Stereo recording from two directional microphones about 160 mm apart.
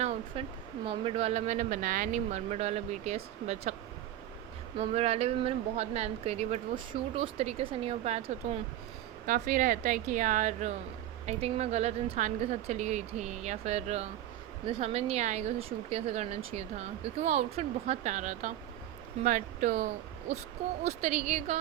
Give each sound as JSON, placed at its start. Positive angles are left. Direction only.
{"t": 0.0, "sound": "a sound", "side_deg": -40}
{"t": 0.9, "sound": "speech", "side_deg": -35}
{"t": 4.8, "sound": "speech", "side_deg": -40}
{"t": 9.2, "sound": "speech", "side_deg": -55}